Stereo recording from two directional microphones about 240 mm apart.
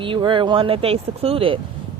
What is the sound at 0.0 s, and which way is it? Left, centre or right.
Speech, right.